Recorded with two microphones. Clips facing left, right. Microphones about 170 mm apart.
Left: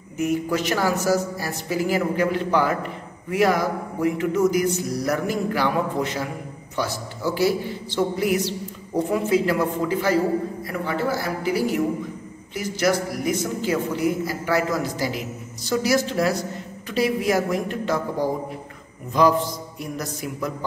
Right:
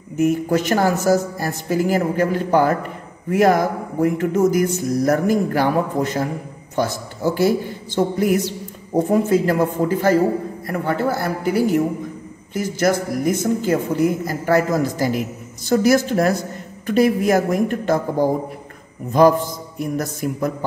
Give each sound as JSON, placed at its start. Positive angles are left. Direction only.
{"t": 0.2, "sound": "a man's voice", "side_deg": -50}
{"t": 19.8, "sound": "a man's voice", "side_deg": -50}